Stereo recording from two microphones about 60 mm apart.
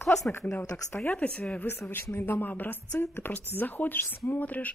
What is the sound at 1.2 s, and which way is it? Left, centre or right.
Speech, left.